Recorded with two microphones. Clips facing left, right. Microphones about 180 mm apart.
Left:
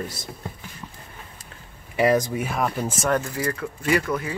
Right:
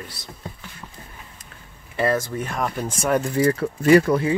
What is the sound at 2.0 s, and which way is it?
Speech, 15° left (ahead or behind).